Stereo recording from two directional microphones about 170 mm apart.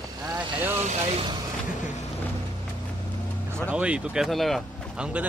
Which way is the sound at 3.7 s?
5° right (ahead or behind).